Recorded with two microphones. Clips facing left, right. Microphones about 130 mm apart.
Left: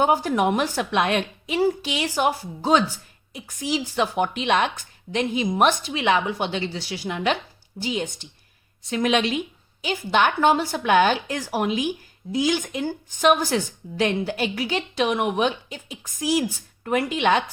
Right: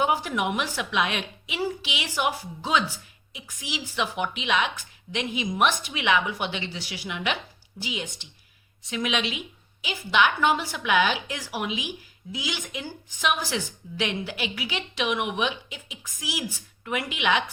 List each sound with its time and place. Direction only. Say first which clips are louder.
0.0 s a woman's voice: left 5 dB; 40° left (ahead or behind)